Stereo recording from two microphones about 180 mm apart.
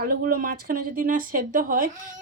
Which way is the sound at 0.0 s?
50° right (ahead or behind).